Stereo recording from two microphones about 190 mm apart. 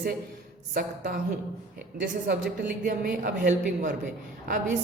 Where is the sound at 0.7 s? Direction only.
50° right (ahead or behind).